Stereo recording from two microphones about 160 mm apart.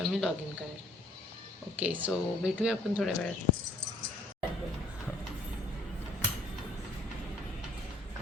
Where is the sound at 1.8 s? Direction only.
10° right (ahead or behind).